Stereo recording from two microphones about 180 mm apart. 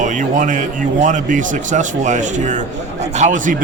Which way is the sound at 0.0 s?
45° right (ahead or behind).